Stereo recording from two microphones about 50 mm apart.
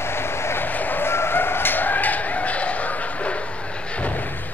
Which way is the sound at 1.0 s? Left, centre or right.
Left.